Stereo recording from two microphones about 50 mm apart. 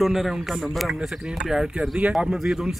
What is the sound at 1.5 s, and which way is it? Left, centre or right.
Speech, centre.